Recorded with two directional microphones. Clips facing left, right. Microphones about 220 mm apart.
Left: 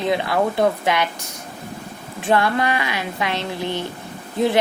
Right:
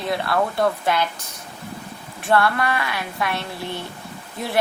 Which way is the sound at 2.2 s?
20° left (ahead or behind).